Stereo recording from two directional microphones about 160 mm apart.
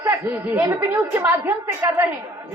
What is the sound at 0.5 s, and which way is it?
A woman's voice, 15° right (ahead or behind).